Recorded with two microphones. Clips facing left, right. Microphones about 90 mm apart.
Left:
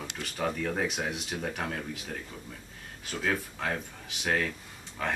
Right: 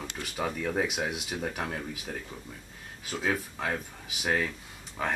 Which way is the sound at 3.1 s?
10° right (ahead or behind).